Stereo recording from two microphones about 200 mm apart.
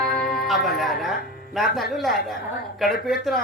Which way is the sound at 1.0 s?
Centre (ahead or behind).